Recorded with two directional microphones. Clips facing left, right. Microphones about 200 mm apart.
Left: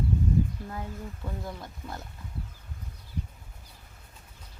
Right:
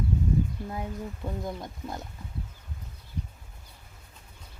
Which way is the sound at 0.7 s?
15° right (ahead or behind).